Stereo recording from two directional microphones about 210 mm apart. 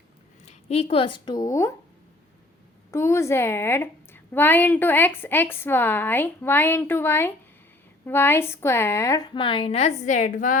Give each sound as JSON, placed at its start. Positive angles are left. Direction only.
{"t": 0.4, "sound": "speech", "side_deg": 30}
{"t": 2.9, "sound": "a woman's voice", "side_deg": 15}